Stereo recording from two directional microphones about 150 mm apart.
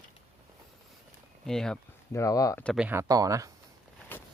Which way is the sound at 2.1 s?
20° left (ahead or behind).